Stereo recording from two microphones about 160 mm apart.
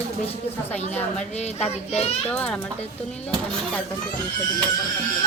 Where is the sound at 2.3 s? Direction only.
5° left (ahead or behind).